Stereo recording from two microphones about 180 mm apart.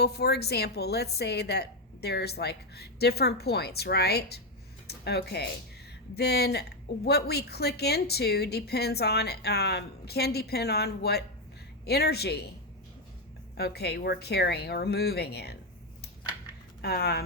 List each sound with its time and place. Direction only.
0.0 s a woman's voice: 65° left (ahead or behind)
13.6 s a woman's voice: 65° left (ahead or behind)
16.8 s a woman's voice: 60° left (ahead or behind)